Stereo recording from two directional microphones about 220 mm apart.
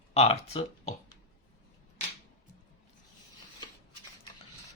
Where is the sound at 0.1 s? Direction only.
30° left (ahead or behind).